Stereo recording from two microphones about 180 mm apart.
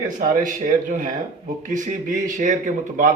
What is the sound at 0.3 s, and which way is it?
A man's voice, 45° right (ahead or behind).